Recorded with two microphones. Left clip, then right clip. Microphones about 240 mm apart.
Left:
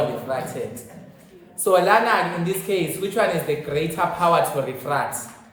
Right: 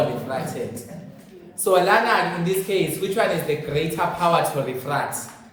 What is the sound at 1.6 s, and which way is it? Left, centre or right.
Speech, left.